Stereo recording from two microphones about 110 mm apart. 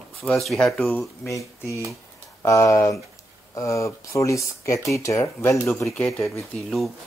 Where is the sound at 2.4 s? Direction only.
30° left (ahead or behind); by 6.2 s 10° left (ahead or behind).